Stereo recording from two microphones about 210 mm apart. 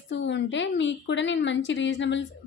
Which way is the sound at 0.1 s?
60° left (ahead or behind).